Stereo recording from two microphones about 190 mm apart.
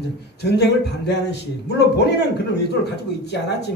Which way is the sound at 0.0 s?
60° left (ahead or behind).